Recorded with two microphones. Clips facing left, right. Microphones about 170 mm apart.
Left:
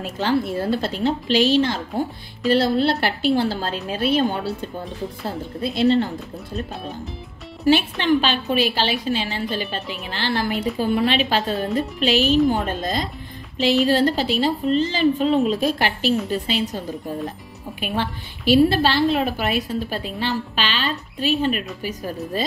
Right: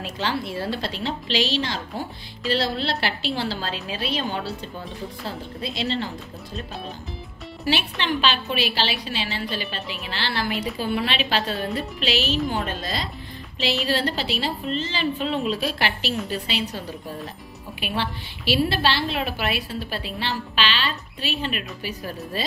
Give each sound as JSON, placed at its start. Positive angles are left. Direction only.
{"t": 0.0, "sound": "speech", "side_deg": 50}
{"t": 5.6, "sound": "speech", "side_deg": 50}
{"t": 7.6, "sound": "speech", "side_deg": 45}
{"t": 10.5, "sound": "a woman's voice", "side_deg": 0}
{"t": 10.8, "sound": "speech", "side_deg": 45}
{"t": 17.7, "sound": "speech", "side_deg": 45}